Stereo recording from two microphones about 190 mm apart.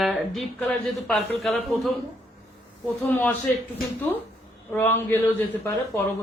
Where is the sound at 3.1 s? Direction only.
10° left (ahead or behind).